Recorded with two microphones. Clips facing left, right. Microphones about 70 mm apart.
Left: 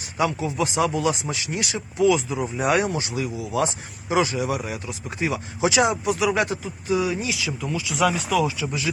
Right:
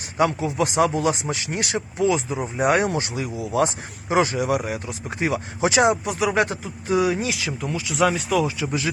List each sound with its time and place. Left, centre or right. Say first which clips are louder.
0.2 s speech: right 2 dB; right
2.0 s speech: left 3 dB; right